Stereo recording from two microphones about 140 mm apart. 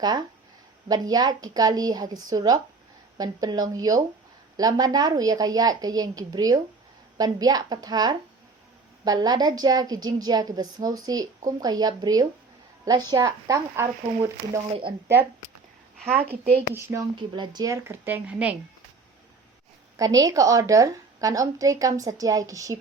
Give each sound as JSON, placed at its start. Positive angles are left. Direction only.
{"t": 0.0, "sound": "a woman's voice", "side_deg": -30}
{"t": 16.0, "sound": "a woman's voice", "side_deg": -15}
{"t": 20.0, "sound": "a woman's voice", "side_deg": -25}